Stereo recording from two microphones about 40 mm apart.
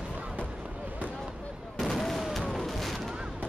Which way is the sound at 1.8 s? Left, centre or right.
Centre.